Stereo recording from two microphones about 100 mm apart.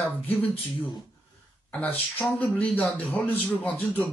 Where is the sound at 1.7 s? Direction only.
15° left (ahead or behind).